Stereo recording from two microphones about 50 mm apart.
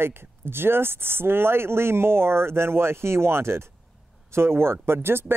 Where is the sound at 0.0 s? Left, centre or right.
Right.